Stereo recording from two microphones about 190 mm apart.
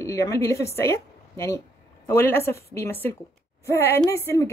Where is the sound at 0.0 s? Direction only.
15° left (ahead or behind).